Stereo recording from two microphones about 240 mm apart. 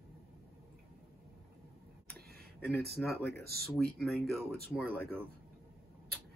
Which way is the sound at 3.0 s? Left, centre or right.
Centre.